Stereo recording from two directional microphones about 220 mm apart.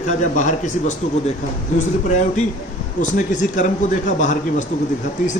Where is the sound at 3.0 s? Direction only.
35° left (ahead or behind).